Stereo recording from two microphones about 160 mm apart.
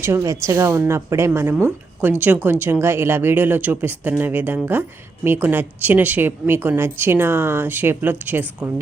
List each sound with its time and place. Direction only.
0.0 s speech: 15° right (ahead or behind)